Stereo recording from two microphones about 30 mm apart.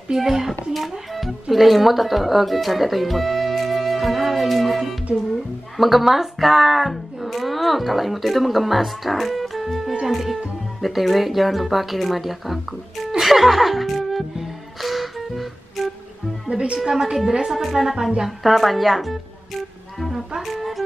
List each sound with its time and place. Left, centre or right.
0.1 s speech: centre
0.5 s a woman's voice: centre
4.0 s music: centre
5.3 s speech: centre
14.8 s music: centre
16.4 s a woman's voice: right
17.5 s speech: centre
20.4 s speech: centre